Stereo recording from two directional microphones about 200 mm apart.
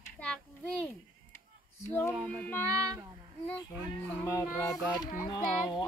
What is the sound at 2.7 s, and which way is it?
Speech, 15° right (ahead or behind).